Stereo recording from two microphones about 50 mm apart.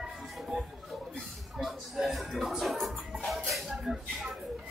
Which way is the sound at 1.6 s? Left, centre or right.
Centre.